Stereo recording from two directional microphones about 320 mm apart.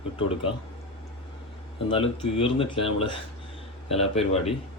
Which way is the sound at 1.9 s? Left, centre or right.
Centre.